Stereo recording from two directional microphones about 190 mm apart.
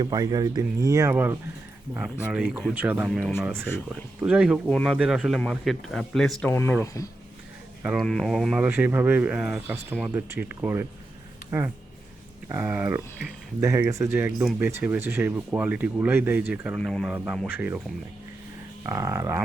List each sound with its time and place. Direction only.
0.0 s speech: 20° right (ahead or behind)
3.1 s speech: 5° left (ahead or behind)
7.8 s speech: 5° right (ahead or behind)
12.5 s speech: 15° right (ahead or behind)
18.8 s speech: 15° right (ahead or behind)